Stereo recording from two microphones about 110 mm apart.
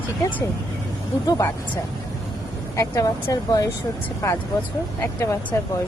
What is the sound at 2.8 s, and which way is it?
Speech, 30° left (ahead or behind).